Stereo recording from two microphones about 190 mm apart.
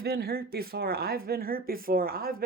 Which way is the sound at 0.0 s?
55° right (ahead or behind).